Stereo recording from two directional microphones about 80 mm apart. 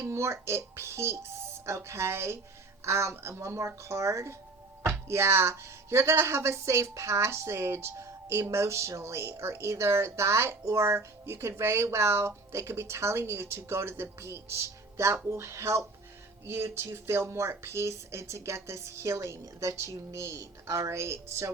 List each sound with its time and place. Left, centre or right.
0.0 s speech: right